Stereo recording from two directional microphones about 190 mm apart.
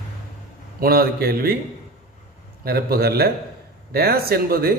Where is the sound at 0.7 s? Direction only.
50° right (ahead or behind).